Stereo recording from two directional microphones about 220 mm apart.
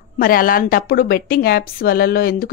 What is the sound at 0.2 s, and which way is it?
A woman's voice, 40° left (ahead or behind).